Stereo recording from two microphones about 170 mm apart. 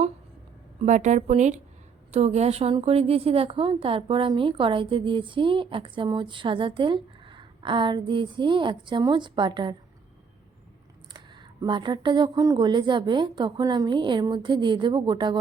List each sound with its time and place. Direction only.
0.8 s a woman's voice: 45° right (ahead or behind); by 9.7 s 25° right (ahead or behind)
11.6 s a woman's voice: 25° right (ahead or behind)